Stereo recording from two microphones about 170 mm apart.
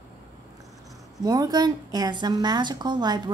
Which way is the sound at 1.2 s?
20° right (ahead or behind).